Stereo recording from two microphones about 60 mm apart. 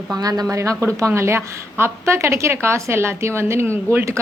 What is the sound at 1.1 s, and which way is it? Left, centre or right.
A woman's voice, right.